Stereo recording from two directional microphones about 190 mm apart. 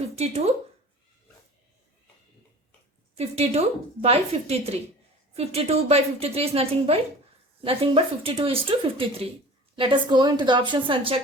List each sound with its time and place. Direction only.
0.2 s a woman's voice: 35° right (ahead or behind)
3.2 s a woman's voice: 35° right (ahead or behind)